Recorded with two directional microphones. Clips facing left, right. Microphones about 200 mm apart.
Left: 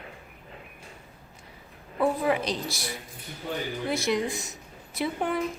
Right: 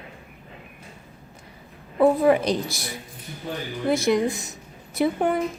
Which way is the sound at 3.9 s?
50° right (ahead or behind).